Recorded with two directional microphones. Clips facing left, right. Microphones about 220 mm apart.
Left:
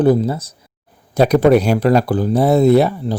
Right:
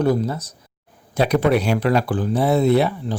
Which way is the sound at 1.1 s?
40° left (ahead or behind).